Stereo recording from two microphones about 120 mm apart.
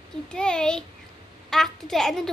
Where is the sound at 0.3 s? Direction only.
5° left (ahead or behind).